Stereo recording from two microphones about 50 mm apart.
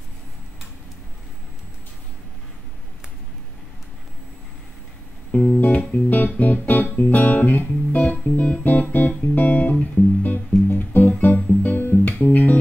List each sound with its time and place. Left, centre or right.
5.3 s music: left
11.1 s music: left